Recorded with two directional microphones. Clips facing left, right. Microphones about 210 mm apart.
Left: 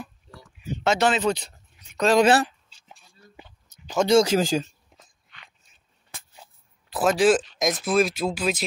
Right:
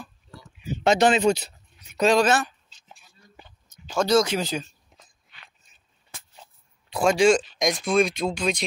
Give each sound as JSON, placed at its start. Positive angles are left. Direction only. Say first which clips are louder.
{"t": 0.8, "sound": "speech", "louder": "right 3 dB", "side_deg": -15}
{"t": 2.2, "sound": "speech", "louder": "left 4 dB", "side_deg": 30}
{"t": 3.4, "sound": "a sound", "louder": "left 1 dB", "side_deg": 10}
{"t": 4.3, "sound": "speech", "louder": "left 5 dB", "side_deg": 45}
{"t": 4.9, "sound": "dog", "louder": "left 3 dB", "side_deg": -5}
{"t": 6.3, "sound": "speech", "louder": "even", "side_deg": 5}